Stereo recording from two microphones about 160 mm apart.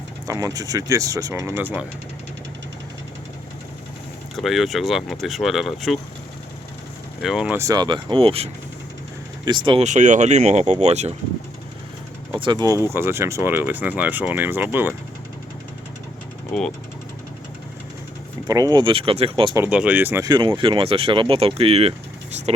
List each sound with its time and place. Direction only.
0.3 s speech: 20° right (ahead or behind)
4.4 s speech: centre (ahead or behind)
7.2 s speech: 5° right (ahead or behind)
7.6 s speech: 25° right (ahead or behind)
9.8 s speech: 50° right (ahead or behind)
12.3 s speech: 25° right (ahead or behind)
12.9 s speech: 15° right (ahead or behind)
16.5 s speech: 5° left (ahead or behind)
18.4 s speech: 25° right (ahead or behind)
19.5 s speech: 10° right (ahead or behind)
20.2 s speech: 25° right (ahead or behind)